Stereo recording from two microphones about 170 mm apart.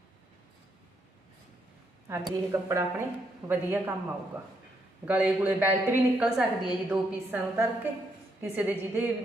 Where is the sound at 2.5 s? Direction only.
20° right (ahead or behind).